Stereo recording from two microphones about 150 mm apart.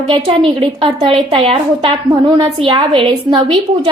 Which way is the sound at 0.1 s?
35° right (ahead or behind).